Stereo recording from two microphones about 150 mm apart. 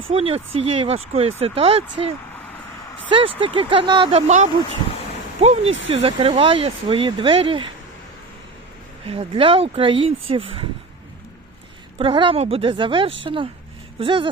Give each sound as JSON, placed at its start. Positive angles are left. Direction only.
{"t": 0.1, "sound": "speech", "side_deg": -40}
{"t": 5.4, "sound": "speech", "side_deg": -45}
{"t": 9.0, "sound": "speech", "side_deg": -35}
{"t": 11.9, "sound": "speech", "side_deg": -35}